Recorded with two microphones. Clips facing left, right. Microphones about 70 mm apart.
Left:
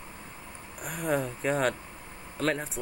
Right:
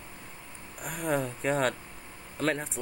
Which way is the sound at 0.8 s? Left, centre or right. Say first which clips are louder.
Left 1 dB; centre.